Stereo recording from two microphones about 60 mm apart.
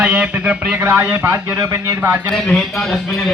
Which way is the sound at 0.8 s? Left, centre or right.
Right.